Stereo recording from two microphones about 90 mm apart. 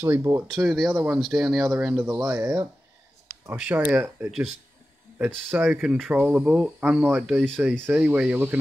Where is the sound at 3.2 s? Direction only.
30° right (ahead or behind).